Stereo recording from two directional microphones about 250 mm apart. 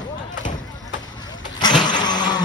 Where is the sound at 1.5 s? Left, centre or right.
Centre.